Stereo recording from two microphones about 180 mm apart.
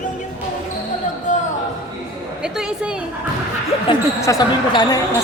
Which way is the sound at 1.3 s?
40° left (ahead or behind).